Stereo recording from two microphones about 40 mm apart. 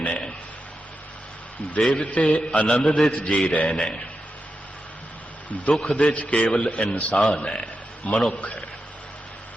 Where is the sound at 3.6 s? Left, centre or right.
Centre.